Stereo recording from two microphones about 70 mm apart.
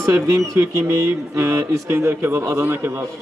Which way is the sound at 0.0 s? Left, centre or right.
Right.